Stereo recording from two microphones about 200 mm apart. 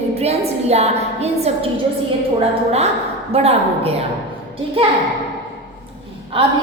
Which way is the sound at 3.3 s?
30° right (ahead or behind).